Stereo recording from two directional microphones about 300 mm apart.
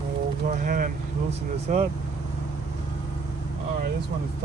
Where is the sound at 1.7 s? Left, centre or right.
Right.